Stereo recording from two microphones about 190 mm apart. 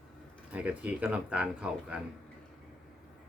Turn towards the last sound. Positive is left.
turn(degrees=-5)  # may be behind; listen again after turning